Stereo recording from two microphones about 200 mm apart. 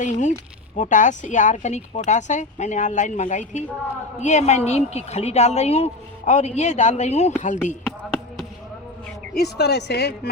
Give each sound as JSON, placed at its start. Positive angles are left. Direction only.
{"t": 0.0, "sound": "speech", "side_deg": 35}
{"t": 9.3, "sound": "a woman's voice", "side_deg": 55}